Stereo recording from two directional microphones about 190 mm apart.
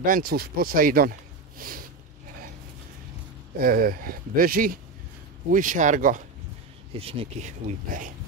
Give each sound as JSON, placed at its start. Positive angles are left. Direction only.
{"t": 0.0, "sound": "speech", "side_deg": -50}
{"t": 1.6, "sound": "snort", "side_deg": -50}
{"t": 3.5, "sound": "speech", "side_deg": -50}
{"t": 6.9, "sound": "speech", "side_deg": -30}